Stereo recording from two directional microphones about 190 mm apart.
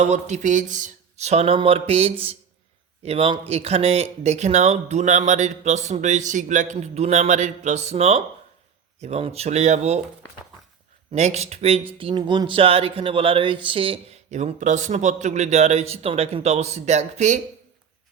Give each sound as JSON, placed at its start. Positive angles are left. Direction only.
{"t": 0.0, "sound": "speech", "side_deg": -35}
{"t": 11.1, "sound": "speech", "side_deg": -35}